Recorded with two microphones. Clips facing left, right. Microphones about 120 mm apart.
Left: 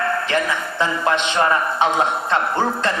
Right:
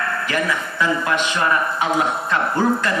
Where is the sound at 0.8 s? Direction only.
25° left (ahead or behind).